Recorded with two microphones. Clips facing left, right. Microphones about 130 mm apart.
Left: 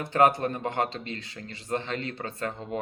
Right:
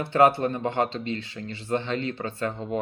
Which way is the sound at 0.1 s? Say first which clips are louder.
Right 2 dB; 40° left (ahead or behind).